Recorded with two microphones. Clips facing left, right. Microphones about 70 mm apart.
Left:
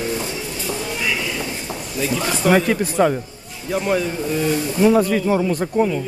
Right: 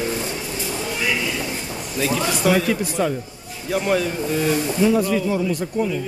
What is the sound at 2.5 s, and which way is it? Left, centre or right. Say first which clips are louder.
Speech: left 3 dB; left.